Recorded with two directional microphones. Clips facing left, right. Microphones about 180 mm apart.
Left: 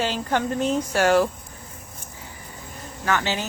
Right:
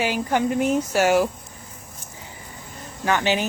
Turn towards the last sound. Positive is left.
turn(degrees=-15)  # may be behind; listen again after turning